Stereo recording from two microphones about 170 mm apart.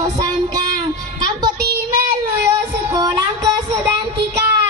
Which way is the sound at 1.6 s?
65° right (ahead or behind).